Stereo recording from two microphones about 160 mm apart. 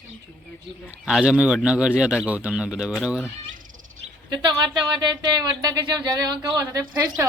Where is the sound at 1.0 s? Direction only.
5° right (ahead or behind).